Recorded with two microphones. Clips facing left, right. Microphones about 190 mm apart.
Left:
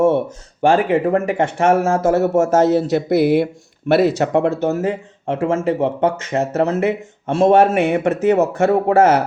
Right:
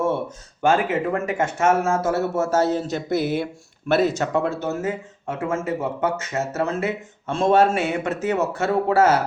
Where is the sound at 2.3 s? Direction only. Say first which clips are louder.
Left 7 dB; 75° left (ahead or behind).